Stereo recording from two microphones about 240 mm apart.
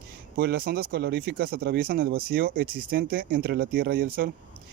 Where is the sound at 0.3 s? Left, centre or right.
Right.